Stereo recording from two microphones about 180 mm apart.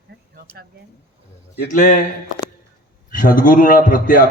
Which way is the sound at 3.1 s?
50° left (ahead or behind).